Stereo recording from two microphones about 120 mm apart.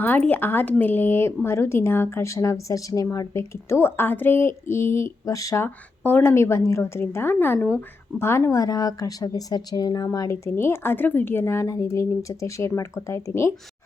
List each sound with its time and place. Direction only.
0.0 s speech: 15° left (ahead or behind)
5.6 s a woman's voice: 15° left (ahead or behind)